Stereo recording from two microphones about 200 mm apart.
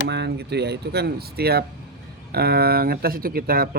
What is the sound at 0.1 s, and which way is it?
Speech, 55° right (ahead or behind).